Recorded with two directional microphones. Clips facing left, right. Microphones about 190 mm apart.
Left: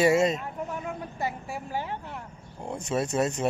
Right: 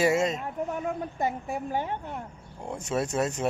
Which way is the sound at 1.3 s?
45° right (ahead or behind).